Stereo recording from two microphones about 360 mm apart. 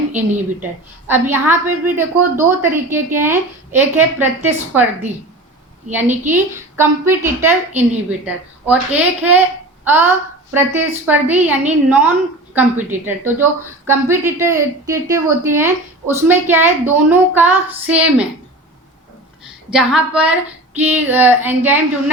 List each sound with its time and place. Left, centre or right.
0.1 s a woman's voice: centre
5.9 s a woman's voice: centre
19.7 s a woman's voice: centre